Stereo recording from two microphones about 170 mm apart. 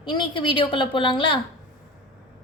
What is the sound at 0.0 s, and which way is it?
A woman's voice, 30° left (ahead or behind).